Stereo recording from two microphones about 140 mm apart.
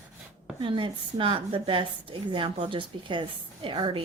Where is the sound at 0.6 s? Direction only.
35° right (ahead or behind).